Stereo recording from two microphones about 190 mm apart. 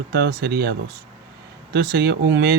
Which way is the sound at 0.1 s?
55° right (ahead or behind).